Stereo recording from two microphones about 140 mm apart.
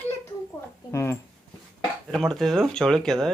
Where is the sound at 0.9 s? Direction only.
20° left (ahead or behind).